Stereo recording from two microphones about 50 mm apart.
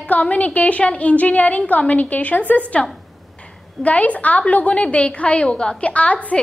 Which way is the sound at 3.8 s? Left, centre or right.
Left.